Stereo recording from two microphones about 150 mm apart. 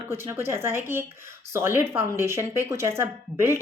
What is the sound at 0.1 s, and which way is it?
Speech, 15° right (ahead or behind).